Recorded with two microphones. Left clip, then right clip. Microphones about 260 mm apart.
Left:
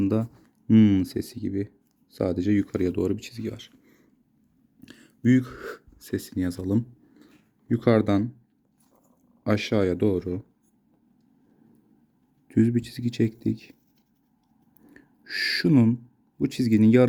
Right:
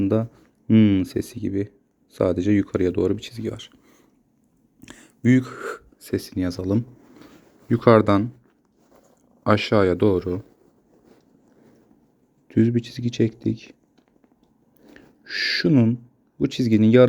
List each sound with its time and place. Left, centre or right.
0.0 s speech: centre
9.4 s speech: centre
12.5 s speech: centre
14.9 s speech: centre